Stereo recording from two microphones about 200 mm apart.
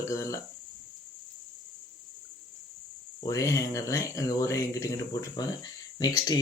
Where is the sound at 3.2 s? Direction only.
15° left (ahead or behind).